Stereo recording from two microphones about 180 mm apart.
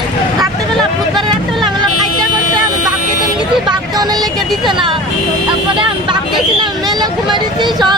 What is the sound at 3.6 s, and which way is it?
Speech, 20° right (ahead or behind).